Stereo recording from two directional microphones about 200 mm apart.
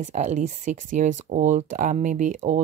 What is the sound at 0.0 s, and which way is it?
Speech, 35° right (ahead or behind).